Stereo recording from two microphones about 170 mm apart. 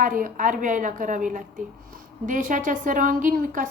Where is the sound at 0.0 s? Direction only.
50° right (ahead or behind).